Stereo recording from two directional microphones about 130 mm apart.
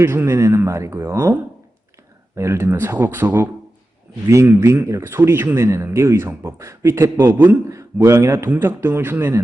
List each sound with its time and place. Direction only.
0.0 s speech: 20° right (ahead or behind)